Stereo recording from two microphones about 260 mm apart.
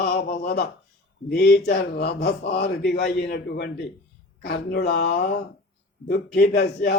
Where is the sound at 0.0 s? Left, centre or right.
Left.